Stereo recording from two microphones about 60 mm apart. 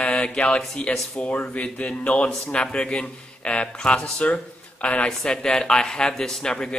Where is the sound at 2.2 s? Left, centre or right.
Centre; by 5.0 s left.